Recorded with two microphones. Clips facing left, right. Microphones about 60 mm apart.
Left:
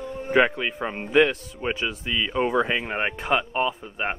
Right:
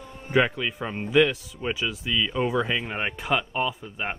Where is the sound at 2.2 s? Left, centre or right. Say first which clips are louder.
Left 4 dB; centre.